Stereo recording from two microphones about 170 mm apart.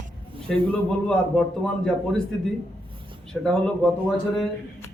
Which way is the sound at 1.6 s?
5° left (ahead or behind).